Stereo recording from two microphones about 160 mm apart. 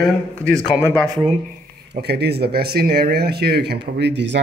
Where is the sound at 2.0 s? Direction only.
90° right.